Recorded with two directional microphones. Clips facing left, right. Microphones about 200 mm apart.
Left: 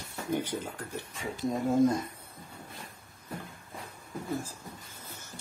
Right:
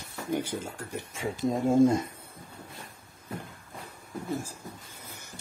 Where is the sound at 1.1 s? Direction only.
25° right (ahead or behind).